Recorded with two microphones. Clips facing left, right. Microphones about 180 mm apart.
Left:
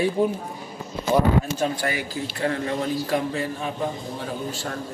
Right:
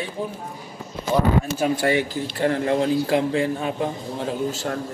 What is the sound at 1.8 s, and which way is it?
Speech, 25° right (ahead or behind).